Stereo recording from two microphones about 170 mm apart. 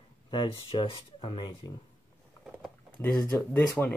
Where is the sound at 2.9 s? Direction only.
10° left (ahead or behind).